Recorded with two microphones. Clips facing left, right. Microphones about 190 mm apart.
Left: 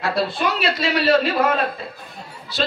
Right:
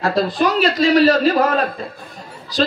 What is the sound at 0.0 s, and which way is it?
Speech, 45° right (ahead or behind).